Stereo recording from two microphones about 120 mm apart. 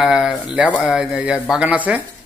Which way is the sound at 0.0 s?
5° right (ahead or behind).